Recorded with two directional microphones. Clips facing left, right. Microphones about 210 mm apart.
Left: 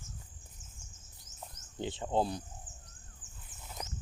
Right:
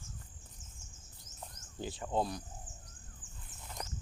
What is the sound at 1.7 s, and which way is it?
Speech, 25° left (ahead or behind).